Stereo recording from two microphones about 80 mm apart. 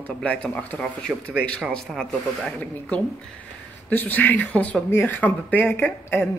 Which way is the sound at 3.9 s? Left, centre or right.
Left.